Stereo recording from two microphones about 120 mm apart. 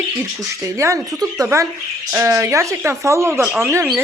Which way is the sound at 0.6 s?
25° right (ahead or behind).